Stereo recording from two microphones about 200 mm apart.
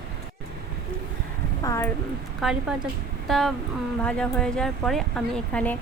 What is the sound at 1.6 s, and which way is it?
Speech, 15° left (ahead or behind).